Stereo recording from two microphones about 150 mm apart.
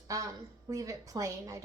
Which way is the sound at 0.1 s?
25° right (ahead or behind).